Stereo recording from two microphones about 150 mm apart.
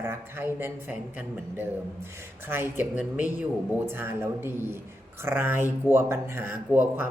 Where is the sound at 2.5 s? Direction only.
15° right (ahead or behind).